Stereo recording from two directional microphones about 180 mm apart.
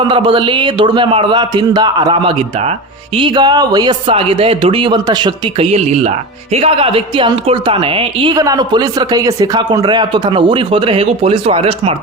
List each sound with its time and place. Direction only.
0.0 s speech: 30° right (ahead or behind)